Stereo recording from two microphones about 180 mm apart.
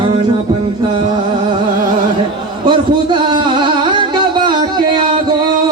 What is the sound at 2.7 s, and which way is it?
Music, 25° right (ahead or behind).